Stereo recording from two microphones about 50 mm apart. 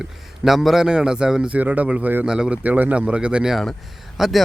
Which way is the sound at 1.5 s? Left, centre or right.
Right.